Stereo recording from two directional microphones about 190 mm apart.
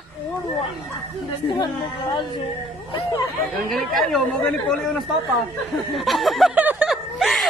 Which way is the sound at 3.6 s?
Centre (ahead or behind).